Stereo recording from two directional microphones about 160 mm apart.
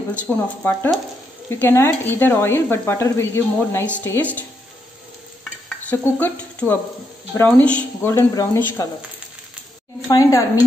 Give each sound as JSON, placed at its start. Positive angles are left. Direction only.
{"t": 0.3, "sound": "speech", "side_deg": 10}
{"t": 1.5, "sound": "speech", "side_deg": 15}
{"t": 5.4, "sound": "stir", "side_deg": 10}
{"t": 7.3, "sound": "speech", "side_deg": 10}
{"t": 10.0, "sound": "speech", "side_deg": 20}